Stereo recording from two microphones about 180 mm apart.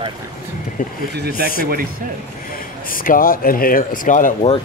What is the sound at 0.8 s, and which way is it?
Speech, 50° left (ahead or behind).